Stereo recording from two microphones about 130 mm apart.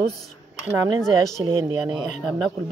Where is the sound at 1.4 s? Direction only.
40° right (ahead or behind).